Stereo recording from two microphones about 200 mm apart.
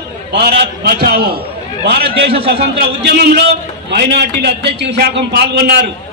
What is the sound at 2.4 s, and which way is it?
A man's voice, 50° right (ahead or behind).